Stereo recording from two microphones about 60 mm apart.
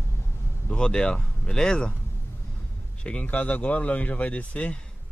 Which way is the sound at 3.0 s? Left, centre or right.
Left.